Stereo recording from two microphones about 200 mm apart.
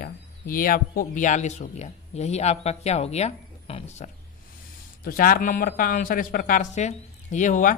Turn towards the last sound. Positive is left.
turn(degrees=40)  # may be behind; listen again after turning